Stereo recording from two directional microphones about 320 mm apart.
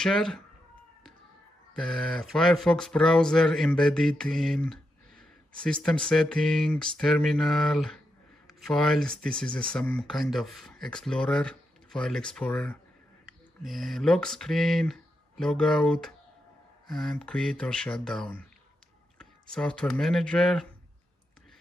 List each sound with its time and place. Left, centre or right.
0.0 s speech: centre
1.8 s speech: centre